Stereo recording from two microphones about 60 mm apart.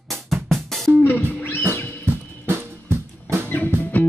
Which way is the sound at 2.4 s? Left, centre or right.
Right.